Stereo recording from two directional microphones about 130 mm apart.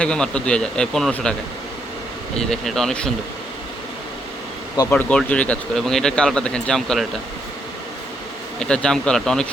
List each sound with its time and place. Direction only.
0.0 s speech: 5° left (ahead or behind)
2.4 s speech: 5° left (ahead or behind)
4.9 s speech: 10° left (ahead or behind)
8.5 s speech: 5° left (ahead or behind)